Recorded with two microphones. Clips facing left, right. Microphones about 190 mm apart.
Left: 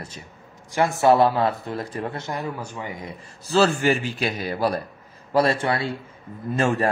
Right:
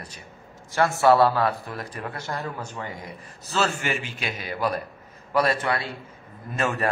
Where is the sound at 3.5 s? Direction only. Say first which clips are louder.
Left 7 dB; 35° left (ahead or behind).